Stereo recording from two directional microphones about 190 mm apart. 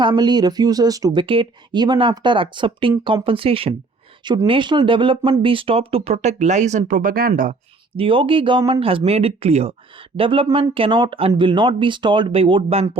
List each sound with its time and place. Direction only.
0.0 s speech: 25° right (ahead or behind); by 7.5 s 50° right (ahead or behind)
7.9 s speech: 25° right (ahead or behind)